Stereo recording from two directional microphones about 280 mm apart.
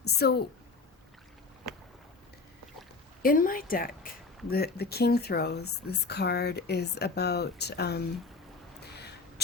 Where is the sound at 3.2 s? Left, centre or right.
Left.